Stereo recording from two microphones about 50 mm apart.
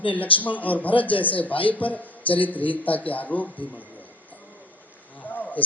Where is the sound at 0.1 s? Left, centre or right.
Left.